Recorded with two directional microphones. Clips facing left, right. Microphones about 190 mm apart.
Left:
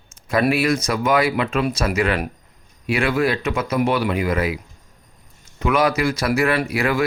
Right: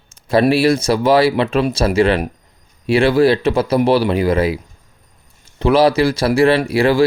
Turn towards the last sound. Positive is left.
turn(degrees=-30)  # may be behind; listen again after turning